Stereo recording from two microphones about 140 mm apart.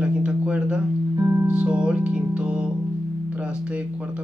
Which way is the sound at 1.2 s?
30° right (ahead or behind).